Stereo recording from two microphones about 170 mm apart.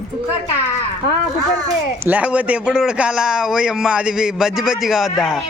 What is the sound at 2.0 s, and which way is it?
A man's voice, 10° right (ahead or behind).